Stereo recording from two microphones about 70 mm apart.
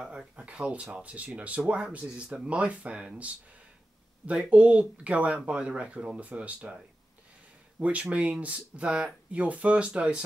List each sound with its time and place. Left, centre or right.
0.0 s speech: centre
7.8 s speech: centre